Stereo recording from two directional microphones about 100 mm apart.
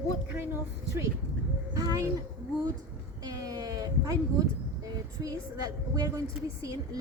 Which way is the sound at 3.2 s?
35° right (ahead or behind).